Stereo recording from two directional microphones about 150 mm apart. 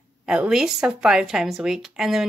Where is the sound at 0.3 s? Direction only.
5° right (ahead or behind).